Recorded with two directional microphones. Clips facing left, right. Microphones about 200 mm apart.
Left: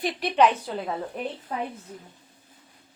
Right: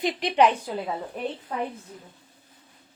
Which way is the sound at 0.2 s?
15° right (ahead or behind).